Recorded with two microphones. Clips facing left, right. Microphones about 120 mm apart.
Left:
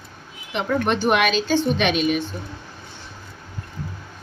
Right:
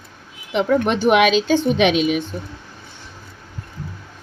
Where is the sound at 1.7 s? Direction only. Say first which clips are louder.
Right 4 dB; 90° right.